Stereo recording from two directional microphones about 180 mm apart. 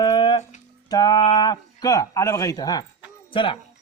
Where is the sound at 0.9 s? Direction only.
20° left (ahead or behind).